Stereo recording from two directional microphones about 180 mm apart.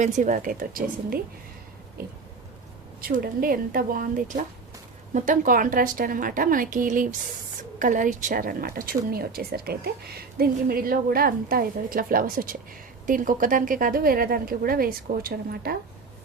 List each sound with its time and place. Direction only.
0.0 s a woman's voice: 45° right (ahead or behind)
3.0 s a woman's voice: 55° right (ahead or behind)